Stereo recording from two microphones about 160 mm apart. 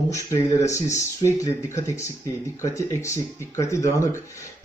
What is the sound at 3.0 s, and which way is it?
Speech, 20° left (ahead or behind).